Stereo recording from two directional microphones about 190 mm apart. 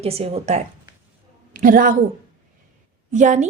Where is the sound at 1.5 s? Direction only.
45° right (ahead or behind).